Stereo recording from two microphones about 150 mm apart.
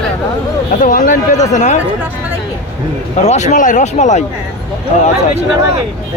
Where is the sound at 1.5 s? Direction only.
50° left (ahead or behind).